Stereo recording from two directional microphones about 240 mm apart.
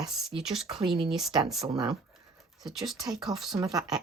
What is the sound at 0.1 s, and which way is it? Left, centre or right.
Speech, centre.